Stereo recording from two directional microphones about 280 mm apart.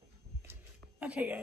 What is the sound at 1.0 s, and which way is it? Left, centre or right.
Speech, centre.